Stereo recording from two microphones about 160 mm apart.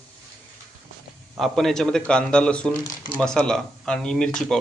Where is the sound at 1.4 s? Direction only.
Centre (ahead or behind).